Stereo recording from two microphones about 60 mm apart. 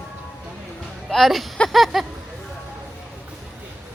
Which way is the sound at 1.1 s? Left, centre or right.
Centre.